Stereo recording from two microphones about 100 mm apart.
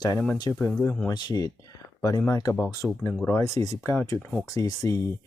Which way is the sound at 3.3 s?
30° left (ahead or behind).